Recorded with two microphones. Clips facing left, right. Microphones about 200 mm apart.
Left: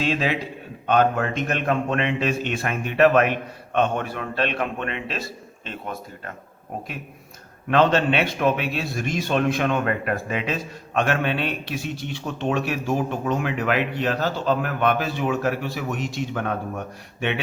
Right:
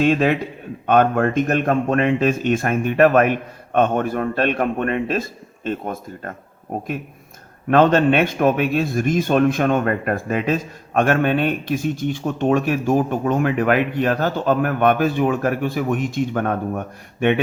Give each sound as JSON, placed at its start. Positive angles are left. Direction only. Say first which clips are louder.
{"t": 0.0, "sound": "a man's voice", "louder": "right 7 dB", "side_deg": -50}
{"t": 7.7, "sound": "a man's voice", "louder": "right 5 dB", "side_deg": -50}